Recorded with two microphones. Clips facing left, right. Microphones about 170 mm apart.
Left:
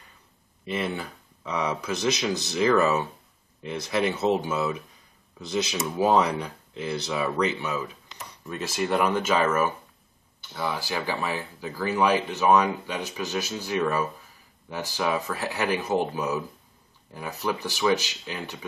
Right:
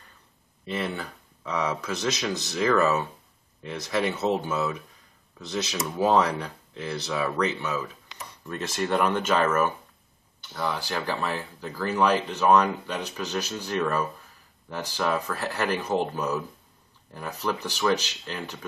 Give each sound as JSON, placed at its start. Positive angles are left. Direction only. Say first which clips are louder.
{"t": 0.7, "sound": "speech", "louder": "left 1 dB", "side_deg": 10}